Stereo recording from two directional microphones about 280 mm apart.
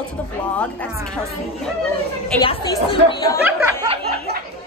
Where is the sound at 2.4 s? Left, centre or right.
Centre.